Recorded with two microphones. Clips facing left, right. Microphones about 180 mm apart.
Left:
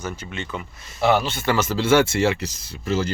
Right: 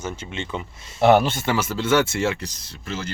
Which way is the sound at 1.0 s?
55° right (ahead or behind).